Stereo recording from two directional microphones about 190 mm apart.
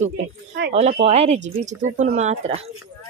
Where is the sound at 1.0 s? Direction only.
35° right (ahead or behind).